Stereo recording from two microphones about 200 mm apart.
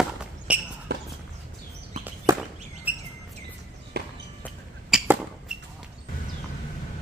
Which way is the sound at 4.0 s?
55° right (ahead or behind).